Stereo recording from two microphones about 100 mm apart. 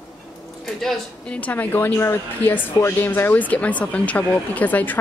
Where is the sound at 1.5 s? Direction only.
20° left (ahead or behind).